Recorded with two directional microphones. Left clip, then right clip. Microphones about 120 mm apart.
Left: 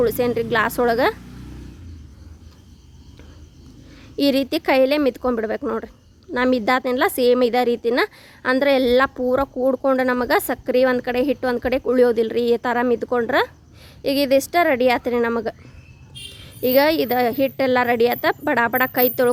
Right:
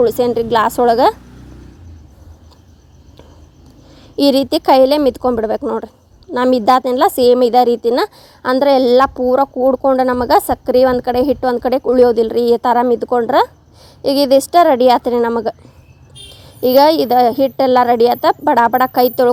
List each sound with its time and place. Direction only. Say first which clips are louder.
0.0 s a woman's voice: right 6 dB; 30° right (ahead or behind)
3.9 s a woman's voice: right 7 dB; 35° right (ahead or behind)